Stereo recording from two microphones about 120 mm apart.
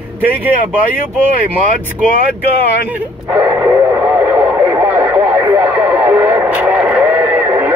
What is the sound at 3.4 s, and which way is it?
Radio, 25° right (ahead or behind).